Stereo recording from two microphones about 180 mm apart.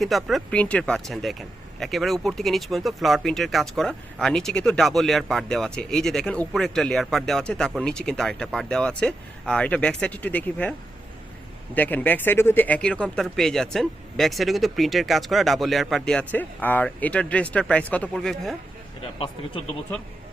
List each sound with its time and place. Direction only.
0.0 s speech: centre (ahead or behind)
19.2 s speech: 30° left (ahead or behind)